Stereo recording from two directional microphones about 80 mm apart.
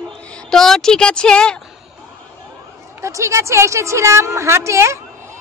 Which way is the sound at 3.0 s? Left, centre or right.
Right.